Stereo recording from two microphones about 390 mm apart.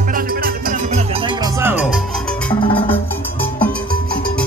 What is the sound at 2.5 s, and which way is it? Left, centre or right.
Music, centre.